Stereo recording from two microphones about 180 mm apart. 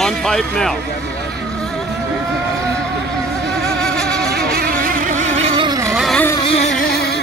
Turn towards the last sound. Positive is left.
turn(degrees=30)  # may be behind; listen again after turning